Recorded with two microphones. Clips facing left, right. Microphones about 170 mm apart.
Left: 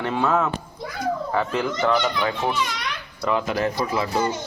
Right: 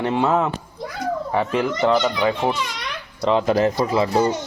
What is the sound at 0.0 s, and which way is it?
Speech, 20° right (ahead or behind).